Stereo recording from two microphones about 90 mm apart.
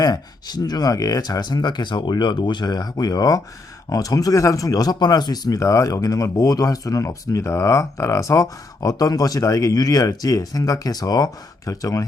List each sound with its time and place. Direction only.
0.0 s speech: 45° left (ahead or behind)